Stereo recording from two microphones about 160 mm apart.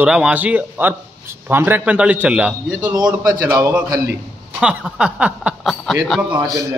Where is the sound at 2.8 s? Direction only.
25° right (ahead or behind).